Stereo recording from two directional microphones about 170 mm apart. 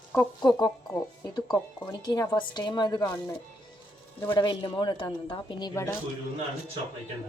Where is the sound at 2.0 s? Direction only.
25° left (ahead or behind).